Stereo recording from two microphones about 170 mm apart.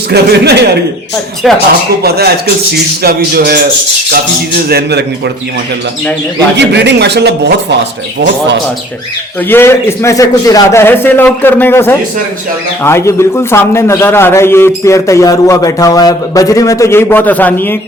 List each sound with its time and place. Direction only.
0.1 s a man's voice: 75° right (ahead or behind)
1.4 s speech: centre (ahead or behind)
2.0 s a man's voice: 65° right (ahead or behind)
6.6 s speech: 85° right
9.5 s a man's voice: 15° left (ahead or behind)